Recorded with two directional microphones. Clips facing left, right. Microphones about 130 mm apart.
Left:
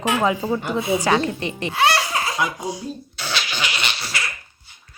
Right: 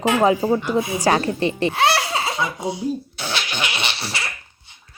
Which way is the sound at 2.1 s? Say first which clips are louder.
Even; 25° right (ahead or behind).